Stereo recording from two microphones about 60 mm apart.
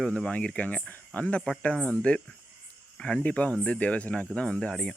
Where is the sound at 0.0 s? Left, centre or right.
Centre.